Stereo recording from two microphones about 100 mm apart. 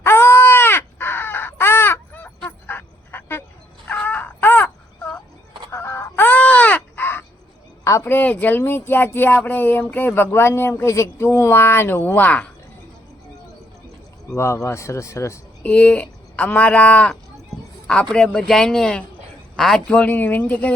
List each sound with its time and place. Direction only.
0.0 s crow: 25° left (ahead or behind)
2.6 s frog: 20° left (ahead or behind)
3.8 s crow: 15° left (ahead or behind)
5.7 s caw: 25° left (ahead or behind)
7.9 s speech: 25° left (ahead or behind)
14.3 s speech: 30° left (ahead or behind)
15.6 s a man's voice: 15° left (ahead or behind)